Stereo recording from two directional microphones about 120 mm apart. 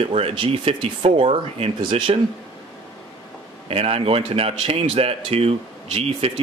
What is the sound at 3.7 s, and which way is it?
A man's voice, 55° right (ahead or behind).